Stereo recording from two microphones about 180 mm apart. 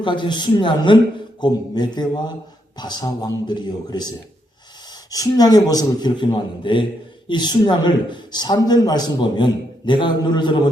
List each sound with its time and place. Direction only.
0.0 s a man's voice: 25° left (ahead or behind)
5.1 s a man's voice: 20° left (ahead or behind)